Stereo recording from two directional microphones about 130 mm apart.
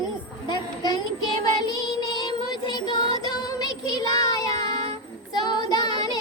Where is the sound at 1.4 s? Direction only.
30° left (ahead or behind).